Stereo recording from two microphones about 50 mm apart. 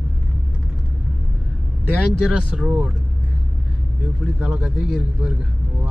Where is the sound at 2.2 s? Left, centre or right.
Centre.